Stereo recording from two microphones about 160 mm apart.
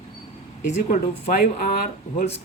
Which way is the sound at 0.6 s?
50° left (ahead or behind).